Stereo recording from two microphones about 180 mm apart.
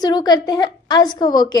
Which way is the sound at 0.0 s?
20° left (ahead or behind).